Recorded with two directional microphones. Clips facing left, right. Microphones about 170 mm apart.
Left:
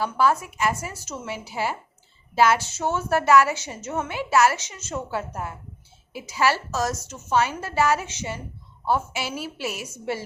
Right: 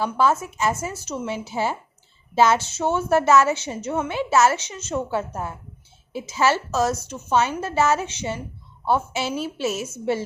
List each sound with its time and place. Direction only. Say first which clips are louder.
0.0 s a woman's voice: right 1 dB; 20° right (ahead or behind)